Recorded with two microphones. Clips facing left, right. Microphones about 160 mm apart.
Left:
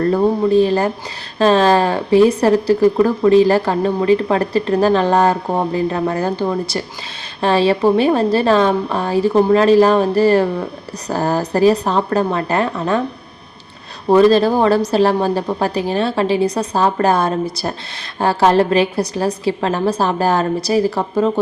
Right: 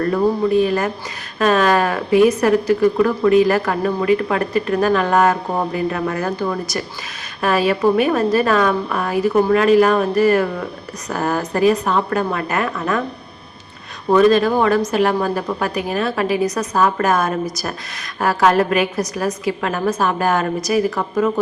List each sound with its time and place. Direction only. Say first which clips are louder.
0.1 s a woman's voice: left 1 dB; 30° left (ahead or behind)
14.1 s a woman's voice: left 2 dB; 30° left (ahead or behind)